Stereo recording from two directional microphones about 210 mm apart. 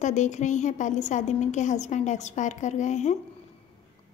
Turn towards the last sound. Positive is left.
turn(degrees=35)  # may be behind; listen again after turning